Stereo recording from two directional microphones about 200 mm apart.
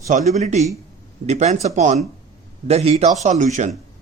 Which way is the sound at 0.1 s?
35° right (ahead or behind).